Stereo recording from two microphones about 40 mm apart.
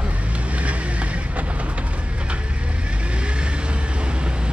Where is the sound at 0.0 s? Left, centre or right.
Right.